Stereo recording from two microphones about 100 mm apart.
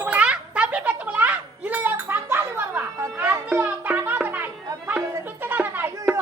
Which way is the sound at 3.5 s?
15° right (ahead or behind).